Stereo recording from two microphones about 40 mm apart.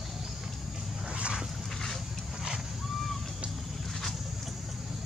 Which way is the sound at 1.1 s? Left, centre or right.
Right.